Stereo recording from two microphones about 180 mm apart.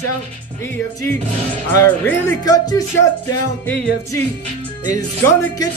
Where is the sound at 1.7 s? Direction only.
15° left (ahead or behind).